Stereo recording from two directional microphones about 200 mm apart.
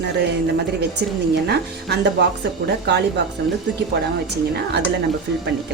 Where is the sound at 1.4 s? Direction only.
55° right (ahead or behind).